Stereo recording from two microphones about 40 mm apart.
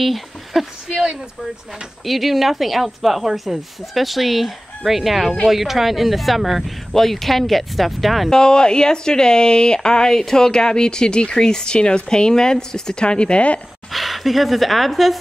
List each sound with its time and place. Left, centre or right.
0.0 s a sound: centre
2.0 s speech: centre
8.3 s speech: centre
13.9 s speech: centre